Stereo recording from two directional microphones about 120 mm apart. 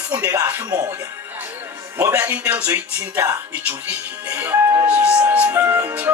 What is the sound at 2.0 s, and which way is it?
Speech, 25° right (ahead or behind).